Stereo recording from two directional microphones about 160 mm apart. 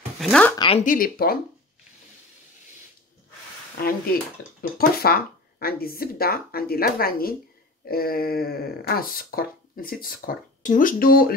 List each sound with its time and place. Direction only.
0.2 s speech: 5° left (ahead or behind)
0.6 s speech: 35° left (ahead or behind)
0.8 s speech: 60° left (ahead or behind)
3.8 s speech: 70° left (ahead or behind)